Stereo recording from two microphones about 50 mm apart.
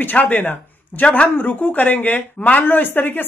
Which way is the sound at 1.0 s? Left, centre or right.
Left.